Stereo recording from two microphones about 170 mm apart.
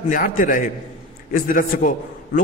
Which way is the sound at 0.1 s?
55° left (ahead or behind).